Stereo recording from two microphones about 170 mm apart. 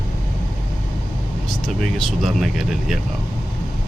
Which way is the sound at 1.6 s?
5° left (ahead or behind).